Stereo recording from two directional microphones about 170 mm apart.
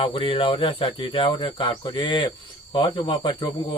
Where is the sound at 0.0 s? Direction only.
30° left (ahead or behind).